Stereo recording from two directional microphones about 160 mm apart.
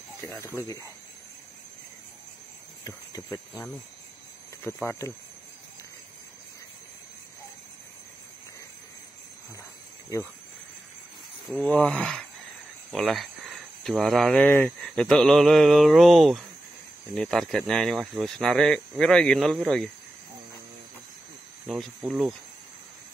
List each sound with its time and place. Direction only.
0.3 s speech: 15° left (ahead or behind)
2.8 s speech: 20° left (ahead or behind)
4.6 s speech: 15° left (ahead or behind)
11.5 s speech: 5° left (ahead or behind)
21.6 s speech: centre (ahead or behind)